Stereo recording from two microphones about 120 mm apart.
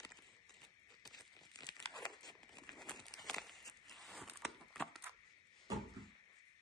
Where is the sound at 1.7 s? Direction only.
5° left (ahead or behind).